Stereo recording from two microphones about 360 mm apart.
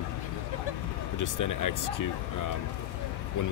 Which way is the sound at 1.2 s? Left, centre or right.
Left.